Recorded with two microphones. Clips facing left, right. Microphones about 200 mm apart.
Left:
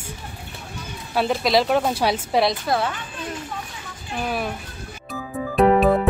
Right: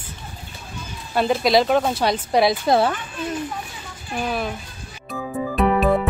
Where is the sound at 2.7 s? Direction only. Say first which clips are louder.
Right 5 dB; 20° right (ahead or behind).